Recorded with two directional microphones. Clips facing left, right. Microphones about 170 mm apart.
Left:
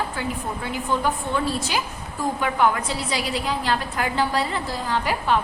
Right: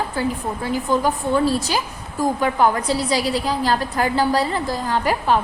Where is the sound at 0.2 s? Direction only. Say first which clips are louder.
Right 5 dB; 40° right (ahead or behind).